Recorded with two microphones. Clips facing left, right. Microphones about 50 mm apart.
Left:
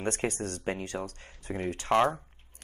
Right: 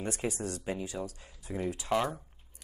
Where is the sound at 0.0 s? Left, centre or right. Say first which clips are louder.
Left 3 dB; left.